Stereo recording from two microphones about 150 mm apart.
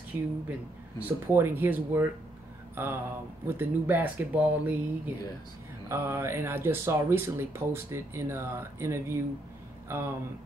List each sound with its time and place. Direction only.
0.1 s speech: 15° right (ahead or behind)